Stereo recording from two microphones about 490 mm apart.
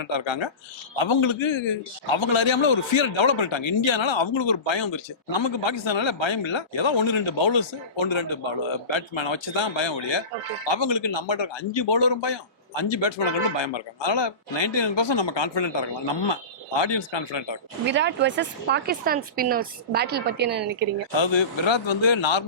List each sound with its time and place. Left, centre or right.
0.0 s speech: left
17.8 s speech: right
21.2 s speech: left